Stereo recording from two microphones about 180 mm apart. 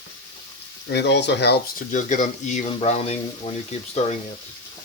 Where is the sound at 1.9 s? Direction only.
45° left (ahead or behind).